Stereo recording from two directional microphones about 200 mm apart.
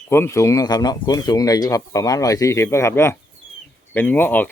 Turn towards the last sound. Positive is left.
turn(degrees=10)  # may be behind; listen again after turning